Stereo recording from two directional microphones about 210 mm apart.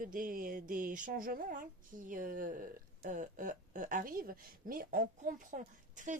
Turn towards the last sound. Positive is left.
turn(degrees=-35)  # may be behind; listen again after turning